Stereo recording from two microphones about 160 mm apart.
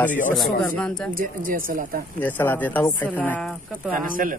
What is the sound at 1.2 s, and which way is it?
Speech, 60° right (ahead or behind).